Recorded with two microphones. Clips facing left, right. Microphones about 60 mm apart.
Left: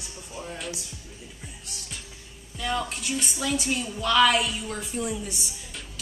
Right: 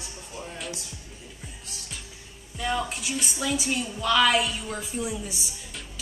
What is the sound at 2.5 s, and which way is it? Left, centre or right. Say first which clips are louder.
A woman's voice: right 1 dB; centre.